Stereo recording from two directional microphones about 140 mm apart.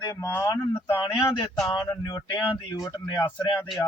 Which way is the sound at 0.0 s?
25° left (ahead or behind).